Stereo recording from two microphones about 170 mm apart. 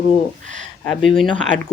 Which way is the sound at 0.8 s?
Centre (ahead or behind).